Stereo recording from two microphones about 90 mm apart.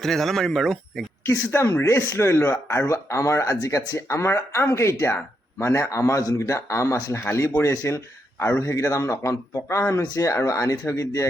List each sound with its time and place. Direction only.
0.0 s speech: 5° left (ahead or behind)
1.3 s speech: 30° left (ahead or behind)